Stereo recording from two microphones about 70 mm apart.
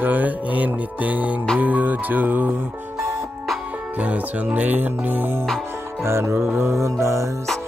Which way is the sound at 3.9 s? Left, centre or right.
Right.